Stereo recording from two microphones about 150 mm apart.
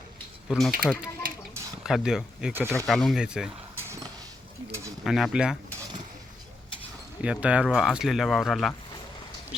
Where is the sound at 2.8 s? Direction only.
Centre (ahead or behind).